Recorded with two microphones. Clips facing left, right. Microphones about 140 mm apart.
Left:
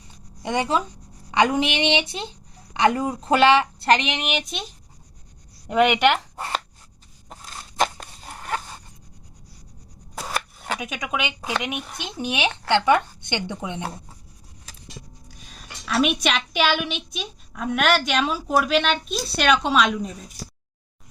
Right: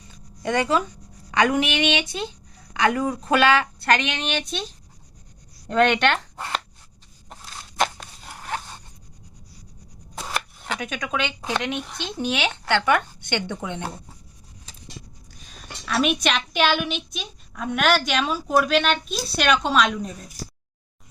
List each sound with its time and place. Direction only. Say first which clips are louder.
0.4 s a woman's voice: right 1 dB; 20° left (ahead or behind)
4.1 s speech: even; 10° left (ahead or behind)
5.6 s speech: left 1 dB; 10° left (ahead or behind)
8.4 s zipper: left 2 dB; 40° left (ahead or behind)
10.2 s chopping: left 1 dB; 5° left (ahead or behind)
10.8 s speech: right 2 dB; 10° left (ahead or behind)
15.3 s a woman's voice: right 2 dB; centre (ahead or behind)